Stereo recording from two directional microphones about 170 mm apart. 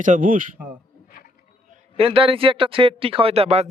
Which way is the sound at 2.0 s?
35° right (ahead or behind).